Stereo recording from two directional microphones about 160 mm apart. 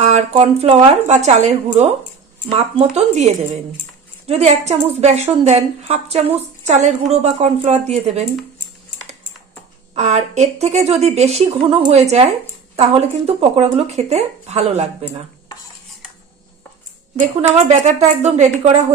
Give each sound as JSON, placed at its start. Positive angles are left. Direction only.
{"t": 0.0, "sound": "a woman's voice", "side_deg": -45}
{"t": 3.0, "sound": "a woman's voice", "side_deg": -45}
{"t": 9.9, "sound": "a woman's voice", "side_deg": -45}
{"t": 17.2, "sound": "a woman's voice", "side_deg": -45}